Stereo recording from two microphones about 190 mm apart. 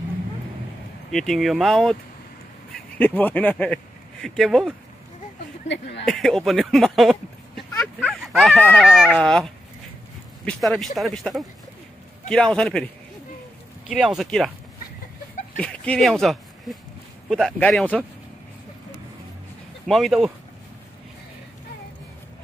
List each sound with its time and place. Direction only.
1.1 s speech: centre (ahead or behind)
5.7 s speech: 65° left (ahead or behind)
6.0 s speech: centre (ahead or behind)
13.8 s speech: centre (ahead or behind)
15.6 s speech: 5° left (ahead or behind)
19.9 s speech: centre (ahead or behind)